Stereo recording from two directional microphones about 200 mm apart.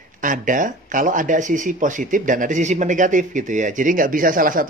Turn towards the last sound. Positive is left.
turn(degrees=-45)  # may be behind; listen again after turning